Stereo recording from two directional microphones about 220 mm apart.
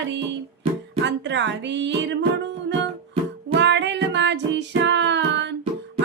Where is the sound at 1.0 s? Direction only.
55° right (ahead or behind).